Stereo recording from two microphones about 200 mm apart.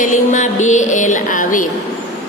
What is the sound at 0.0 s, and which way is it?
Music, 40° left (ahead or behind).